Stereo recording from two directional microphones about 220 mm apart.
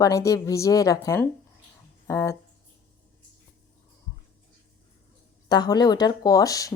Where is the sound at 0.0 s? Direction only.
15° left (ahead or behind).